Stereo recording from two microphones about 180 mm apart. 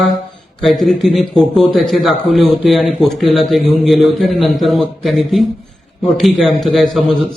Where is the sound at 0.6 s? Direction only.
Centre (ahead or behind).